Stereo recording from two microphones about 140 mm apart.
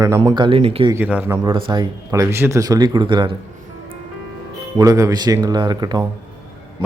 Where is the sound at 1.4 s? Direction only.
35° right (ahead or behind).